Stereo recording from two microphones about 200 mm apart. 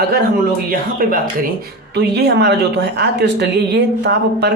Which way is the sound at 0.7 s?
45° right (ahead or behind).